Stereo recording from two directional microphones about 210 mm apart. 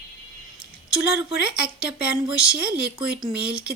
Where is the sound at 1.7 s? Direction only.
5° right (ahead or behind).